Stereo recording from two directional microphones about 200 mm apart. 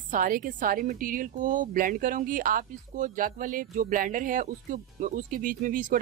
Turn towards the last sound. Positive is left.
turn(degrees=-40)  # may be behind; listen again after turning